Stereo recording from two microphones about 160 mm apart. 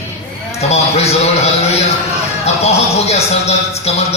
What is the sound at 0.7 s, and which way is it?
Speech, 40° left (ahead or behind).